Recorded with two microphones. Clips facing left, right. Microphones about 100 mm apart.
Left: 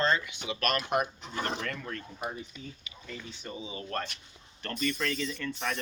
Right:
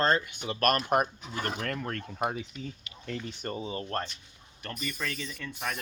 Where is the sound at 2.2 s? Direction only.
80° right.